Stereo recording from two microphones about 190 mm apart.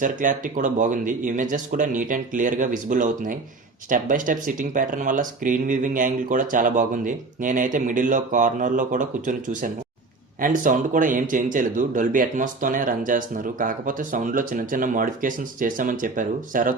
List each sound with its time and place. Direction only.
0.0 s speech: 45° right (ahead or behind)